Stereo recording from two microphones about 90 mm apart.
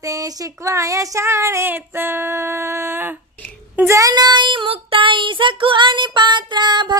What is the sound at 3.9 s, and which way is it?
Child singing, 40° right (ahead or behind).